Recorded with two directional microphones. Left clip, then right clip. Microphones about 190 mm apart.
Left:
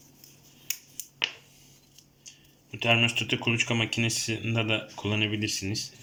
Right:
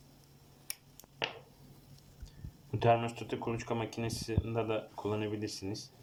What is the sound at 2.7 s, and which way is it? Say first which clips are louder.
Speech: left 5 dB; 10° left (ahead or behind).